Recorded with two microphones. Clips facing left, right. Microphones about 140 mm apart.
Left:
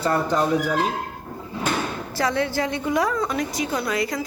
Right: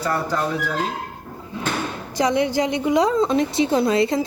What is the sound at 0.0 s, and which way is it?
Speech, 25° left (ahead or behind).